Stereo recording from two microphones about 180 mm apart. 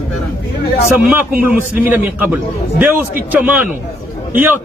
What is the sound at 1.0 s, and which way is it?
A man's voice, 10° right (ahead or behind).